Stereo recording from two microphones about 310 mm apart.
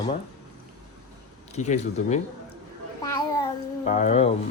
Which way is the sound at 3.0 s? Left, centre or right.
Centre.